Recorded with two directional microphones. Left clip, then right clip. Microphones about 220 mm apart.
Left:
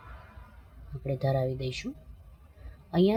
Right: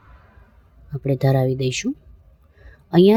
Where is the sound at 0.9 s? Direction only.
45° right (ahead or behind).